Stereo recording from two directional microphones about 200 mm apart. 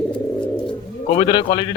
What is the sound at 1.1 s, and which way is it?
Speech, 25° left (ahead or behind).